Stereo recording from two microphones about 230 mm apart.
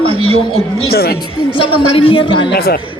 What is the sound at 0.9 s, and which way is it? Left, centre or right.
Speech, left.